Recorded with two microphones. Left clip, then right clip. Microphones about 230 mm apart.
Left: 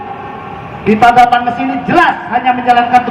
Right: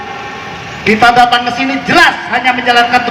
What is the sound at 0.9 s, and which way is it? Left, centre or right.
A man's voice, left.